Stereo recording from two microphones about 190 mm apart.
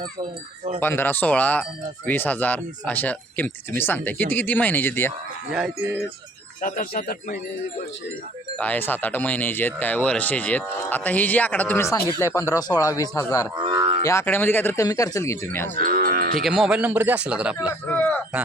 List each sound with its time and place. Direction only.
0.8 s speech: 10° left (ahead or behind)
5.5 s speech: 5° right (ahead or behind)
6.6 s speech: 45° left (ahead or behind)
8.5 s speech: 10° left (ahead or behind)
13.6 s cattle: 20° right (ahead or behind)
14.0 s speech: 15° left (ahead or behind)
15.7 s cattle: 50° right (ahead or behind)
16.4 s speech: centre (ahead or behind)
17.8 s a sound: 10° left (ahead or behind)